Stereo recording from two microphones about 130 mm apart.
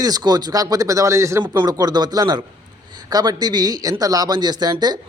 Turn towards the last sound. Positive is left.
turn(degrees=-30)  # may be behind; listen again after turning